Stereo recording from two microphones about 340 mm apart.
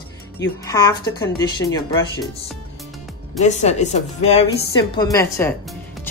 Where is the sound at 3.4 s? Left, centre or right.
Left.